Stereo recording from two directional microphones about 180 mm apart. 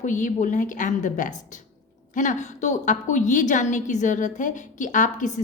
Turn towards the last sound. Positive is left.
turn(degrees=45)  # may be behind; listen again after turning